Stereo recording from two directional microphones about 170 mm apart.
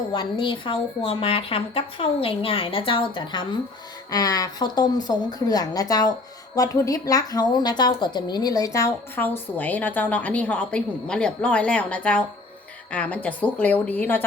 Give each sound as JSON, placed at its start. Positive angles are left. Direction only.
{"t": 0.1, "sound": "a woman's voice", "side_deg": 30}